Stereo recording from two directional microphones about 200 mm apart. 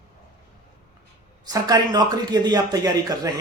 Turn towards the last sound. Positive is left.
turn(degrees=-20)  # may be behind; listen again after turning